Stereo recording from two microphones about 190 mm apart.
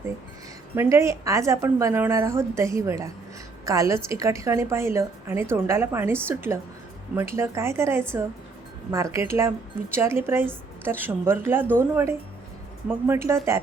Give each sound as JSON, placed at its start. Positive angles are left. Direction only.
{"t": 0.8, "sound": "a woman's voice", "side_deg": -15}